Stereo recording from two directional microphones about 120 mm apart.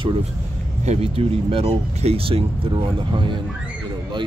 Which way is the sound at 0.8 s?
60° right (ahead or behind).